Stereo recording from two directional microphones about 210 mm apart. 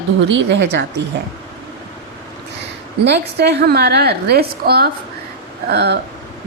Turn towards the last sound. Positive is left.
turn(degrees=-50)  # may be behind; listen again after turning